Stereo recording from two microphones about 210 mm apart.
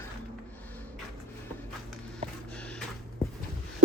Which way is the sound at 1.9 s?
5° left (ahead or behind).